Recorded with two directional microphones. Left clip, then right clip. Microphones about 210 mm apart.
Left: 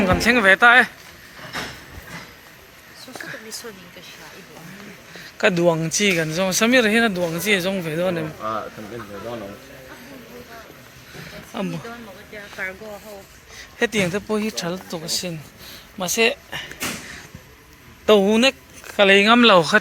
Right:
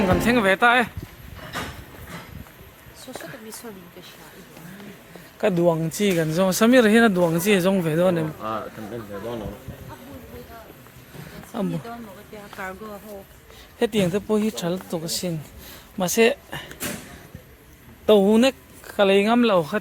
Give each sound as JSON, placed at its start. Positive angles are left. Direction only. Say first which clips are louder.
{"t": 0.1, "sound": "speech", "louder": "left 6 dB", "side_deg": -15}
{"t": 5.4, "sound": "speech", "louder": "left 2 dB", "side_deg": -10}
{"t": 6.3, "sound": "speech", "louder": "right 3 dB", "side_deg": -30}
{"t": 8.4, "sound": "speech", "louder": "left 3 dB", "side_deg": -10}
{"t": 13.6, "sound": "speech", "louder": "left 1 dB", "side_deg": -15}
{"t": 18.0, "sound": "a man's voice", "louder": "left 1 dB", "side_deg": -10}
{"t": 18.3, "sound": "speech", "louder": "left 1 dB", "side_deg": -20}
{"t": 18.9, "sound": "speech", "louder": "left 4 dB", "side_deg": -5}